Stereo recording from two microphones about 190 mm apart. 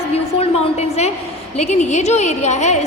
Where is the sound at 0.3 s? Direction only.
35° left (ahead or behind).